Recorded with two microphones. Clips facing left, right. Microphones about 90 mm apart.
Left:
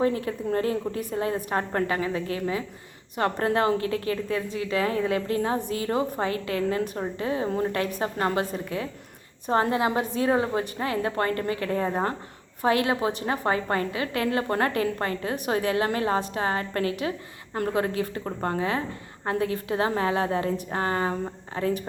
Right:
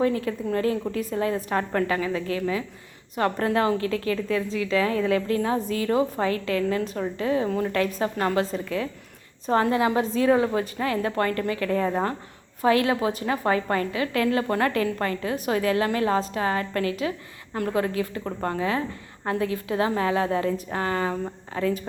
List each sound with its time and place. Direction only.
0.0 s a woman's voice: 30° left (ahead or behind)
5.5 s a woman's voice: 20° left (ahead or behind)
5.8 s a woman's voice: 30° left (ahead or behind)